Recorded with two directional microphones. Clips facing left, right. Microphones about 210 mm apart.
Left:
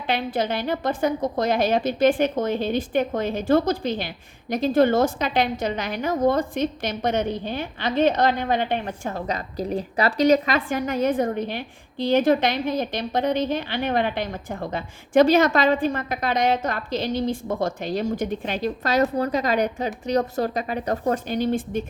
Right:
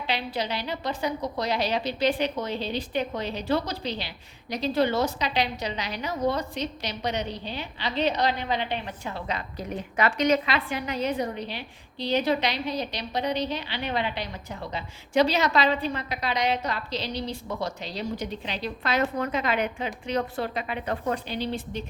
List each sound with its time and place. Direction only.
0.1 s a woman's voice: 50° left (ahead or behind)